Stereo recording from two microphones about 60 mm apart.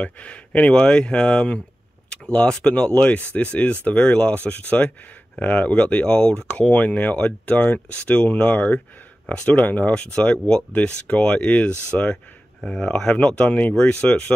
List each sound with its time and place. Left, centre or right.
0.0 s speech: left
9.9 s speech: centre